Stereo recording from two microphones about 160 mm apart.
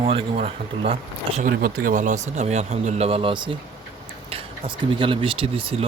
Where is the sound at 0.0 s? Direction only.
35° right (ahead or behind).